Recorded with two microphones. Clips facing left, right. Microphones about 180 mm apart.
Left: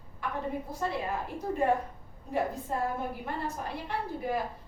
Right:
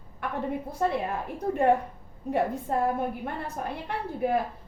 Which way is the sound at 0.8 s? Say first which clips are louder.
Right 7 dB; 60° right (ahead or behind).